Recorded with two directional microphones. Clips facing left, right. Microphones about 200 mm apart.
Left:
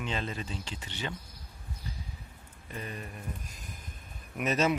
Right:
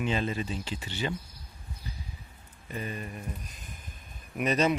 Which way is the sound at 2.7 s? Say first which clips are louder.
Right 4 dB; 5° right (ahead or behind).